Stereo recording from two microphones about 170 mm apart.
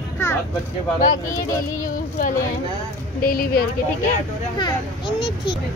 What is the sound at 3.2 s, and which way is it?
Speech, 60° left (ahead or behind).